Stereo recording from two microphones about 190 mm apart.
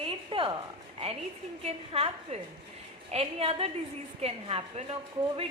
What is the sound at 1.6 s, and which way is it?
A woman's voice, 30° right (ahead or behind).